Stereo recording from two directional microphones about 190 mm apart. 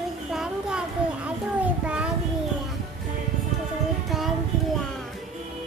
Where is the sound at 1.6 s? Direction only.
5° right (ahead or behind).